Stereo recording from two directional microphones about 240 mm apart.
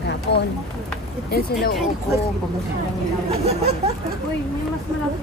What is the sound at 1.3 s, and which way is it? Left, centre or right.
Speech, left.